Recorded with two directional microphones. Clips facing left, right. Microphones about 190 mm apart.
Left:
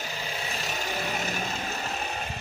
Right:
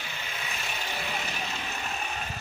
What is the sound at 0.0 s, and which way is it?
Vehicle, 35° left (ahead or behind).